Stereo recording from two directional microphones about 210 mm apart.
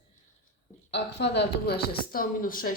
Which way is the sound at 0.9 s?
55° left (ahead or behind).